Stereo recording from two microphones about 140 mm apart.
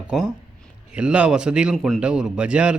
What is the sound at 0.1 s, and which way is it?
Speech, 5° right (ahead or behind).